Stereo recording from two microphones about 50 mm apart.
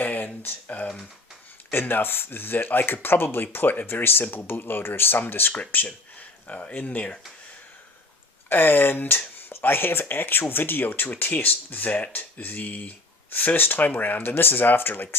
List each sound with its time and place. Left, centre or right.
0.0 s a sound: left
1.7 s speech: left
5.7 s speech: left
8.4 s speech: left